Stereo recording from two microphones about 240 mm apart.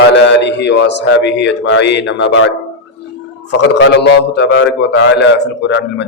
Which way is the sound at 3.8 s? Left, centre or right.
Left.